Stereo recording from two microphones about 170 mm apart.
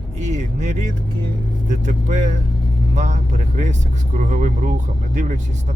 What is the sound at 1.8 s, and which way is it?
Speech, 45° right (ahead or behind).